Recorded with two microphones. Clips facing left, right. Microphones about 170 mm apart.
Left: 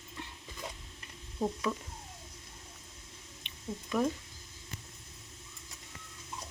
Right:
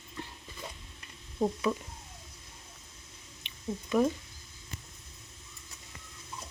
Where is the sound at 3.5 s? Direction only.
Centre (ahead or behind).